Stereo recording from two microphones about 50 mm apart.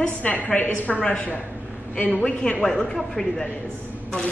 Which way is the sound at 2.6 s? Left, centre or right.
Centre.